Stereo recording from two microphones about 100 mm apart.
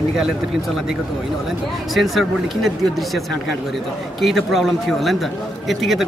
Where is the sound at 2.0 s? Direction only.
Centre (ahead or behind).